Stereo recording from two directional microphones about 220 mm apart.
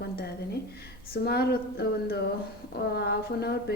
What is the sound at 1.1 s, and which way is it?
A woman's voice, 45° left (ahead or behind).